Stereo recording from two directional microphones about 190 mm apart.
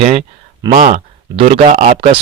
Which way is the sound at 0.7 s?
45° right (ahead or behind).